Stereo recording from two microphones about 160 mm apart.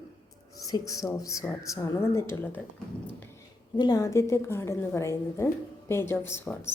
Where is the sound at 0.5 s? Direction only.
20° left (ahead or behind).